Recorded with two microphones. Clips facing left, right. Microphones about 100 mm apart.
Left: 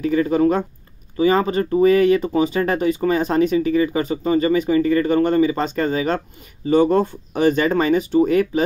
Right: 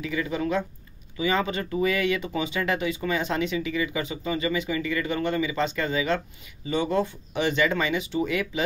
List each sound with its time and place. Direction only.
0.0 s speech: 45° left (ahead or behind)